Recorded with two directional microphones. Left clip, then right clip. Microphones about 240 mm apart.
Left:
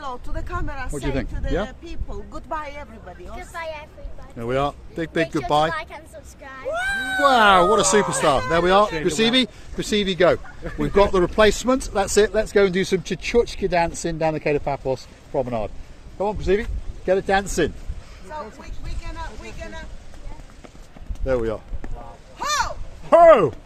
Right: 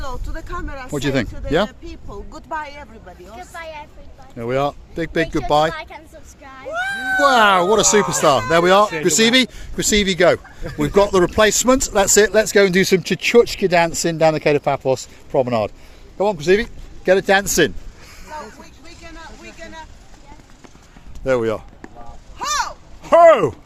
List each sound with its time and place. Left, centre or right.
0.0 s speech: centre
0.9 s speech: right
1.8 s speech: centre
3.3 s speech: centre
4.4 s speech: right
5.7 s speech: centre
7.2 s speech: right
19.0 s a sound: centre
21.2 s speech: right
22.4 s a sound: centre
23.0 s speech: right